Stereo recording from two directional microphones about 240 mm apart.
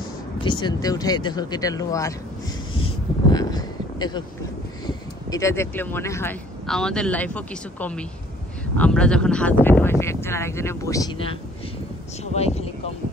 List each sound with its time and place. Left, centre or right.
0.4 s speech: centre
2.8 s a sound: centre
4.8 s speech: centre
12.4 s speech: left